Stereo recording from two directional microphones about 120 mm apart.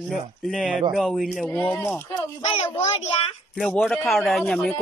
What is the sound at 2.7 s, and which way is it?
Speech, 60° left (ahead or behind).